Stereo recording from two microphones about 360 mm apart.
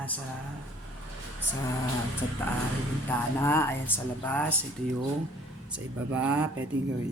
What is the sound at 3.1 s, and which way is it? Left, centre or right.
Speech, centre.